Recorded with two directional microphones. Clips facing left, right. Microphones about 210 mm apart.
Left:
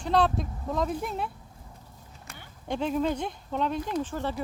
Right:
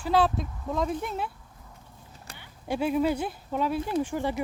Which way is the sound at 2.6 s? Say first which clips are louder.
Right 2 dB; 10° right (ahead or behind).